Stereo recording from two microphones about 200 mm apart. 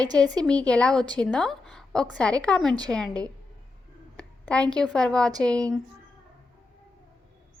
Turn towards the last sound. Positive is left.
turn(degrees=5)  # may be behind; listen again after turning